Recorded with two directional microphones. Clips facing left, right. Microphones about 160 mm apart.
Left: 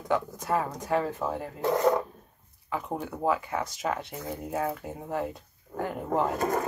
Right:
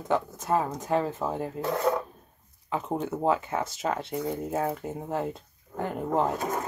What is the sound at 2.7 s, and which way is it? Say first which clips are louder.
Speech: right 3 dB; 25° right (ahead or behind).